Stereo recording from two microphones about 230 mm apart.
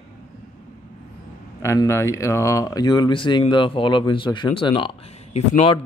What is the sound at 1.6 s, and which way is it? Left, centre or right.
Speech, centre.